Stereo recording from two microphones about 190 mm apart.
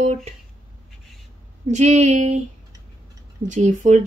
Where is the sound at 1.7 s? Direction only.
35° right (ahead or behind).